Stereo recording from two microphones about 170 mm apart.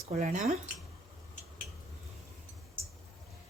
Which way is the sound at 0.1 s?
45° right (ahead or behind).